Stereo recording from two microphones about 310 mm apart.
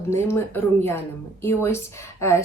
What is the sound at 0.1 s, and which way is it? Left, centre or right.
A woman's voice, centre.